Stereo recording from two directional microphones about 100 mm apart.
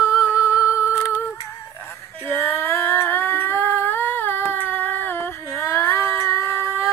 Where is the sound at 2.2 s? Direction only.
25° left (ahead or behind).